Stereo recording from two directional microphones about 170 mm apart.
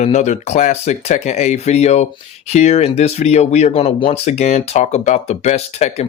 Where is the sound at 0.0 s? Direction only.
40° left (ahead or behind).